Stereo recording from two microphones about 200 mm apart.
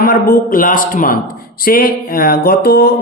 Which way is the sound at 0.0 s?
45° left (ahead or behind).